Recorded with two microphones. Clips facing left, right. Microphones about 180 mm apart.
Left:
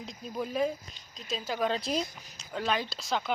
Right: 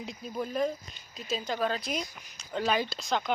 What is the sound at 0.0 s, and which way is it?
Speech, 5° right (ahead or behind).